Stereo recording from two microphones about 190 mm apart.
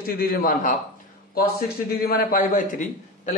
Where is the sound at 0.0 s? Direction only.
50° left (ahead or behind).